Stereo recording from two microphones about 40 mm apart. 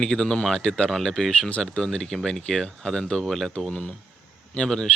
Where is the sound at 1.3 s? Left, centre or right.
Left.